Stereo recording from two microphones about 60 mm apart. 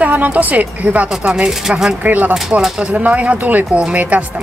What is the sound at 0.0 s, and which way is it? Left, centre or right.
Speech, right.